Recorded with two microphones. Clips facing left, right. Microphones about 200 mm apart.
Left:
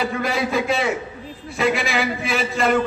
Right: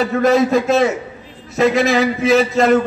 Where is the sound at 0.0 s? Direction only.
45° right (ahead or behind).